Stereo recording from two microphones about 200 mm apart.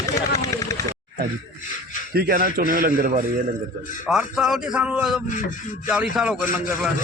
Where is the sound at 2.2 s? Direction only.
50° right (ahead or behind).